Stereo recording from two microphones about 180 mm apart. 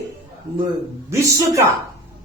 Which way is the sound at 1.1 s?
15° right (ahead or behind).